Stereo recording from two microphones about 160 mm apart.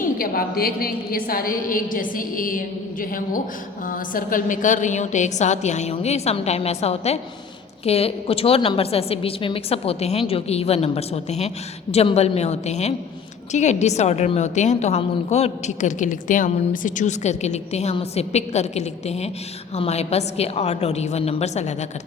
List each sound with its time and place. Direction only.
0.0 s a woman's voice: 65° left (ahead or behind); by 21.8 s 45° left (ahead or behind)